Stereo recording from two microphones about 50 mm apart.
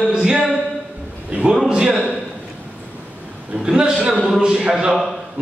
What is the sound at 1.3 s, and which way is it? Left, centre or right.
Speech, right.